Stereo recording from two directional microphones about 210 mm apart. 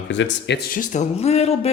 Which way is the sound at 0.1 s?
55° left (ahead or behind).